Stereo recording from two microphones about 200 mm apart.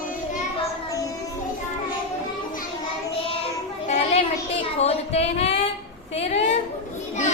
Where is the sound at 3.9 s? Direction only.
30° left (ahead or behind).